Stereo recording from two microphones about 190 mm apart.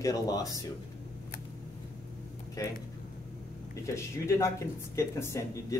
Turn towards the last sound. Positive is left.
turn(degrees=15)  # may be behind; listen again after turning